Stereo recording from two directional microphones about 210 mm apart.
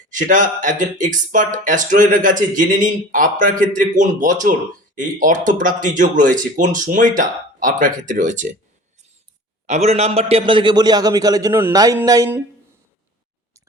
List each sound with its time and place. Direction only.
0.1 s speech: 40° right (ahead or behind)
9.6 s a man's voice: 30° right (ahead or behind); by 12.4 s 15° right (ahead or behind)